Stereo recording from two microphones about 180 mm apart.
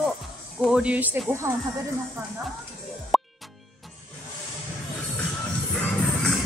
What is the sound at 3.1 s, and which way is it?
Music, centre (ahead or behind).